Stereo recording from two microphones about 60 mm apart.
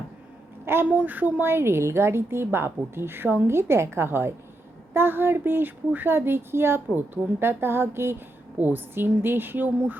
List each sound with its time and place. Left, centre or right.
0.6 s a sound: right
0.9 s speech: right
8.5 s speech: right